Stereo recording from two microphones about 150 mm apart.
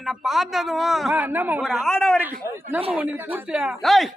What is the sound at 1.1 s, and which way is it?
Speech, 10° right (ahead or behind).